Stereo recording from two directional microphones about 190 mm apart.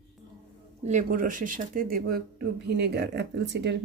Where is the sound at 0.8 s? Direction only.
45° right (ahead or behind).